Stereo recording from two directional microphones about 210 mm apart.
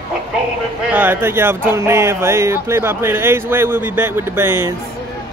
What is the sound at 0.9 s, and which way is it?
Speech, 10° right (ahead or behind).